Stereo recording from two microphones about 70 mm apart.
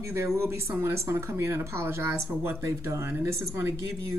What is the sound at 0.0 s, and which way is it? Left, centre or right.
Speech, right.